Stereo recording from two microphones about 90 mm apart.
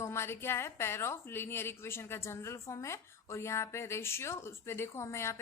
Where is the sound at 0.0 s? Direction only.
30° left (ahead or behind).